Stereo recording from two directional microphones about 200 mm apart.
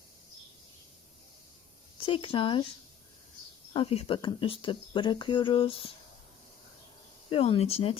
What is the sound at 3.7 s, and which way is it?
Speech, 25° left (ahead or behind).